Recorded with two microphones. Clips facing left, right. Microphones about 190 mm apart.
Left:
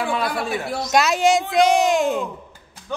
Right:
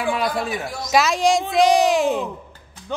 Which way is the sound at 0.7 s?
65° left (ahead or behind).